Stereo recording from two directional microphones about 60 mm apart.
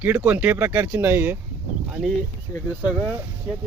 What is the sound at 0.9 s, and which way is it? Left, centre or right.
Speech, right.